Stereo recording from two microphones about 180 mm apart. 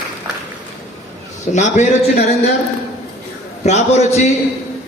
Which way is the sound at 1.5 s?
40° left (ahead or behind).